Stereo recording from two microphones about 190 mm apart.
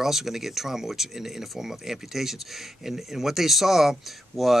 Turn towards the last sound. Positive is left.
turn(degrees=0)  # may be behind; listen again after turning